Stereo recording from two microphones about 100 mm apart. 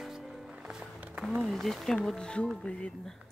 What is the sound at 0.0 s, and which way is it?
Music, centre (ahead or behind).